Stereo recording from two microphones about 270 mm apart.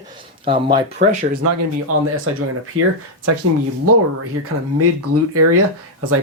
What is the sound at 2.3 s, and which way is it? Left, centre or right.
Speech, right.